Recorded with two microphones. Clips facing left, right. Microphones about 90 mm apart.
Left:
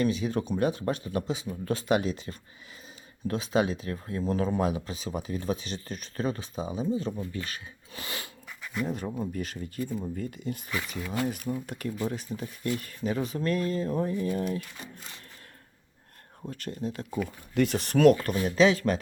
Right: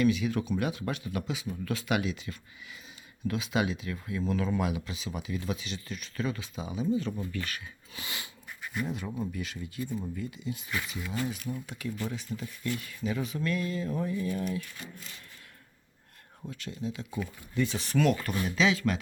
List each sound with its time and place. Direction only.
0.0 s speech: 35° left (ahead or behind)
9.3 s speech: 45° left (ahead or behind)
12.3 s speech: 15° left (ahead or behind)
12.8 s speech: 45° left (ahead or behind)
16.5 s speech: 50° left (ahead or behind)
17.2 s speech: 70° left (ahead or behind); by 18.9 s 40° left (ahead or behind)